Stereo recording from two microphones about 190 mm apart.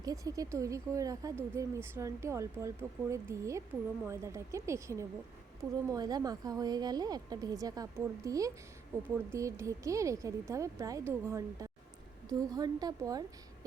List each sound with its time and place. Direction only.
0.0 s speech: 20° right (ahead or behind)